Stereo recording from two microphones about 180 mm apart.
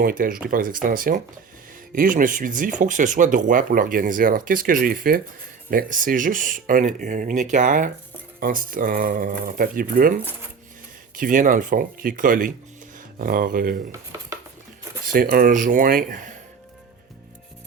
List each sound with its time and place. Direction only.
0.0 s speech: 50° right (ahead or behind)
11.2 s speech: 50° right (ahead or behind)
15.0 s speech: 55° right (ahead or behind)